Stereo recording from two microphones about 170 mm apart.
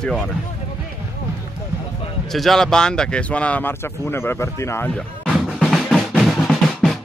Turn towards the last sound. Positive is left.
turn(degrees=0)  # may be behind; listen again after turning